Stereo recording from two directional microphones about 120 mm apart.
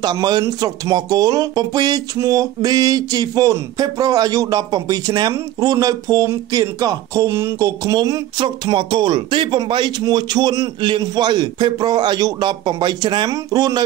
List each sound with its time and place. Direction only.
0.0 s speech: 35° right (ahead or behind)